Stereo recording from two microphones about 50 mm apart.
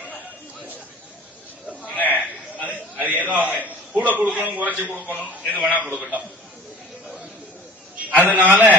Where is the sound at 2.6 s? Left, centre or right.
Right.